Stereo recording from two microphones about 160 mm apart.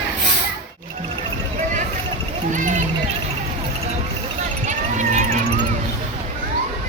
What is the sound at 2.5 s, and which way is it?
Speech, 50° right (ahead or behind).